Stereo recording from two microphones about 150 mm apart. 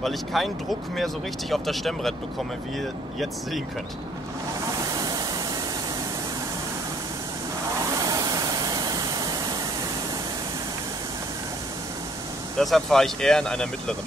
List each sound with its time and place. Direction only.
0.0 s speech: centre (ahead or behind)
4.7 s a sound: 25° right (ahead or behind)
8.0 s waterfall: 25° right (ahead or behind)
12.5 s speech: centre (ahead or behind)